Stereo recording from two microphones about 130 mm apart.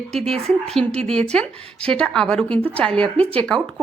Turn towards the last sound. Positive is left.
turn(degrees=10)  # may be behind; listen again after turning